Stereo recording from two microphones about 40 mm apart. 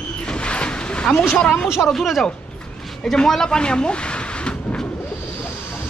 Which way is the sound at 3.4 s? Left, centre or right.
Left.